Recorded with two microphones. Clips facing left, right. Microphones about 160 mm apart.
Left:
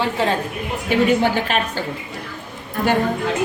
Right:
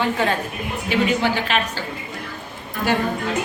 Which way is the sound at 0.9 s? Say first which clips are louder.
Left 3 dB; 50° left (ahead or behind).